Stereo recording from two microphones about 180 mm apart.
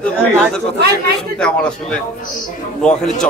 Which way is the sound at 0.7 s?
65° right (ahead or behind).